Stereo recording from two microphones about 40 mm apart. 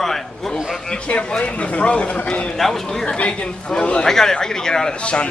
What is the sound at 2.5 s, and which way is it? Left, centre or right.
Speech, centre.